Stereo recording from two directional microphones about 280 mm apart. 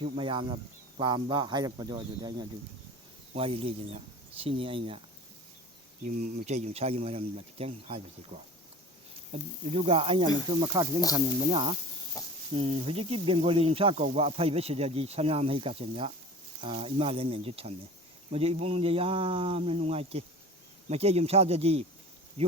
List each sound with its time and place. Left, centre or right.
0.0 s speech: centre
6.0 s speech: right